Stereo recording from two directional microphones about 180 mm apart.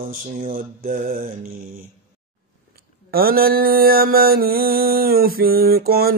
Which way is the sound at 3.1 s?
55° right (ahead or behind).